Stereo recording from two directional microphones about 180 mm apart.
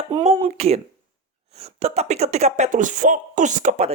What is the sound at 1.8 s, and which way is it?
Speech, 35° right (ahead or behind).